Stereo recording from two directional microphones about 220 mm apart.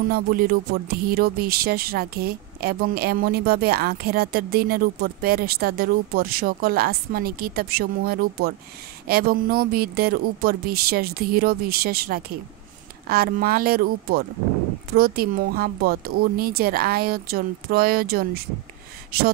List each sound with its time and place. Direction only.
0.1 s speech: 45° right (ahead or behind)
15.0 s speech: 40° right (ahead or behind)